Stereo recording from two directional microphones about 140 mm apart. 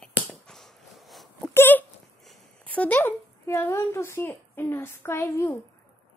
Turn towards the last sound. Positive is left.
turn(degrees=15)  # may be behind; listen again after turning